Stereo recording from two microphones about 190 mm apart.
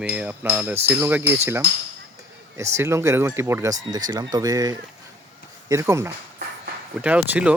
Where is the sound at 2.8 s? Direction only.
15° right (ahead or behind).